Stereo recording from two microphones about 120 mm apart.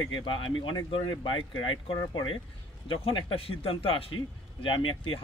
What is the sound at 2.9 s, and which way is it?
Speech, 50° left (ahead or behind).